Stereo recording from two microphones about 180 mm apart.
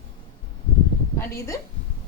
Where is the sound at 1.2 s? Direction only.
15° left (ahead or behind).